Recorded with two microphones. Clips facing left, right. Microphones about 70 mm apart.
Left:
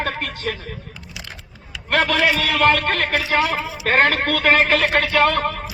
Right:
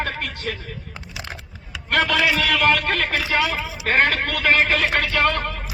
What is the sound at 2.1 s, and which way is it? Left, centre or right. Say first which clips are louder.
Speech: left 1 dB; left.